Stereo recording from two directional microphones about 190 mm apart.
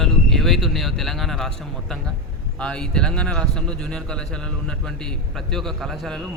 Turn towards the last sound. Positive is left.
turn(degrees=0)  # may be behind; listen again after turning